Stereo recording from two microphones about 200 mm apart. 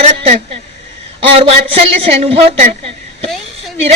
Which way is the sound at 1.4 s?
30° right (ahead or behind).